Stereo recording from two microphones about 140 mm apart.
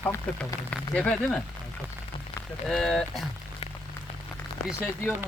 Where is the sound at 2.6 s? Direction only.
5° left (ahead or behind).